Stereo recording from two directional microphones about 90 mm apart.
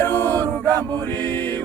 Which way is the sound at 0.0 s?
15° left (ahead or behind).